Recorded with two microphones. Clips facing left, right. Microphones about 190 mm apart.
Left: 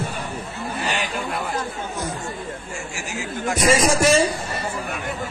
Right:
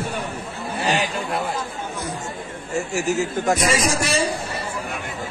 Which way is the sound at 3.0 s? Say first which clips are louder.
Right 8 dB; 45° right (ahead or behind).